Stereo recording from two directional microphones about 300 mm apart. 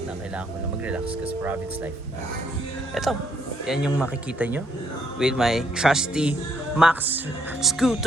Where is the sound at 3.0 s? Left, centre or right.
Centre.